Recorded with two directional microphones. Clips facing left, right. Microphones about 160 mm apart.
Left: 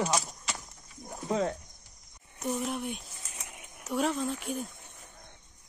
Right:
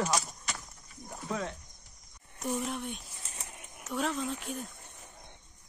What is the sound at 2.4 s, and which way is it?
Speech, centre (ahead or behind).